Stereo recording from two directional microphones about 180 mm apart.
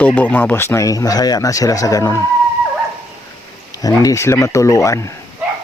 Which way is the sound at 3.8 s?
20° left (ahead or behind).